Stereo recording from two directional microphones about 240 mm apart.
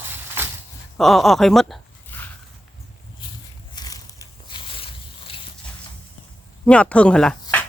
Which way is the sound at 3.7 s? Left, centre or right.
Centre.